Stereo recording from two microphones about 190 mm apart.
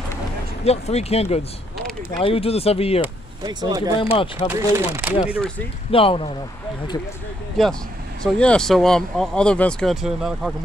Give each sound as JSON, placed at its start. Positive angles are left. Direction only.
{"t": 0.7, "sound": "speech", "side_deg": 35}
{"t": 1.9, "sound": "a sound", "side_deg": 5}
{"t": 2.2, "sound": "speech", "side_deg": 30}
{"t": 3.4, "sound": "speech", "side_deg": -20}
{"t": 3.9, "sound": "speech", "side_deg": 30}
{"t": 4.5, "sound": "speech", "side_deg": -15}
{"t": 5.9, "sound": "speech", "side_deg": 30}
{"t": 7.6, "sound": "speech", "side_deg": 0}